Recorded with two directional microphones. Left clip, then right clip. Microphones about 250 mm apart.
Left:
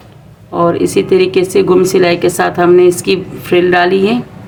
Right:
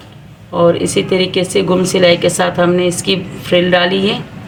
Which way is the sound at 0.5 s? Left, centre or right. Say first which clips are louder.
Left 1 dB; left.